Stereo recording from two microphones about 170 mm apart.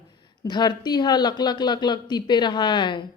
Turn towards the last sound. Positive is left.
turn(degrees=25)  # may be behind; listen again after turning